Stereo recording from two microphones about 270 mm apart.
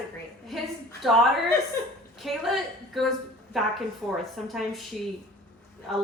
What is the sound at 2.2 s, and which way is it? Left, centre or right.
Speech, centre.